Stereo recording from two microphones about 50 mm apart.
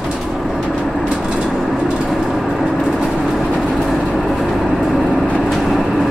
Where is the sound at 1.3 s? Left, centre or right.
Centre.